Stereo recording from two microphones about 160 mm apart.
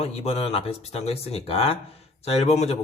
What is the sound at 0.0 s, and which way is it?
Speech, 40° left (ahead or behind).